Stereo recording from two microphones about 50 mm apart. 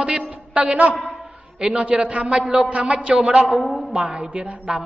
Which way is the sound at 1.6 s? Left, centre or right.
Centre.